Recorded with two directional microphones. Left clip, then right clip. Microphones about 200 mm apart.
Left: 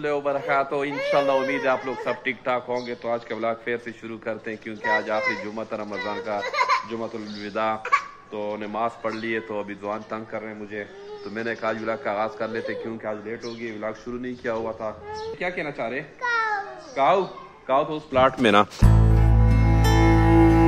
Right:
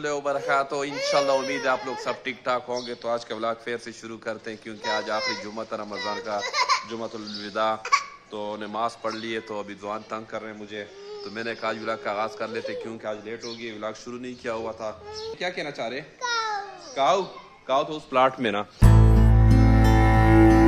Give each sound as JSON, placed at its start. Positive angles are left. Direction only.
{"t": 0.0, "sound": "a man's voice", "side_deg": -20}
{"t": 6.4, "sound": "speech", "side_deg": -40}
{"t": 7.4, "sound": "a man's voice", "side_deg": -20}
{"t": 7.8, "sound": "a man's voice", "side_deg": -30}
{"t": 18.4, "sound": "speech", "side_deg": 10}
{"t": 18.8, "sound": "music", "side_deg": 0}